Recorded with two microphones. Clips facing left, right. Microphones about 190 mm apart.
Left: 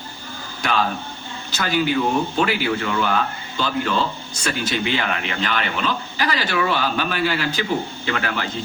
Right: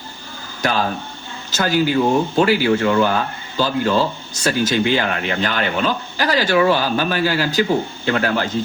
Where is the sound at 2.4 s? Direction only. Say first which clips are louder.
Right 6 dB; 40° right (ahead or behind).